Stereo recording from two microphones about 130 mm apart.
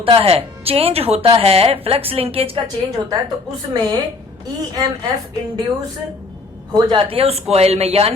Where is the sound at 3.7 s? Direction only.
30° right (ahead or behind).